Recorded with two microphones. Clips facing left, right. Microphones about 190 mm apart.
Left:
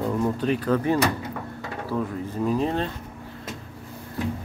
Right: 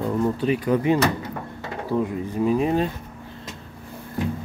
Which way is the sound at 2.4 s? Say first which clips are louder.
Right 4 dB; 10° right (ahead or behind).